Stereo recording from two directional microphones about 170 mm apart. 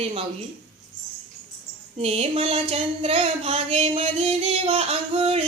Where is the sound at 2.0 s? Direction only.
35° right (ahead or behind).